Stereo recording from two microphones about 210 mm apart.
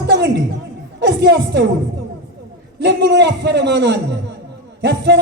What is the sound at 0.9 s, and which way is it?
Speech, 55° right (ahead or behind).